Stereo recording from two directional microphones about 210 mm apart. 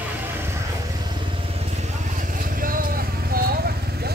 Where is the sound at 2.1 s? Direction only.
40° right (ahead or behind).